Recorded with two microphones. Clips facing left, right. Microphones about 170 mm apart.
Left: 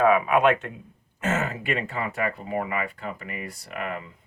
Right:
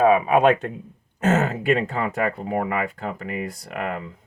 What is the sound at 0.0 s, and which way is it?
Speech, 30° right (ahead or behind).